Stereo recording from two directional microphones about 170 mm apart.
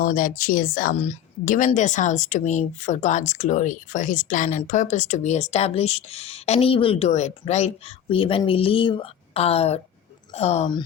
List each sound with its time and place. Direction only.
0.0 s a woman's voice: 55° left (ahead or behind)